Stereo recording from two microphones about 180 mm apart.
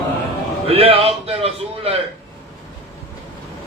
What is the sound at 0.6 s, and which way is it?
Speech, 30° right (ahead or behind).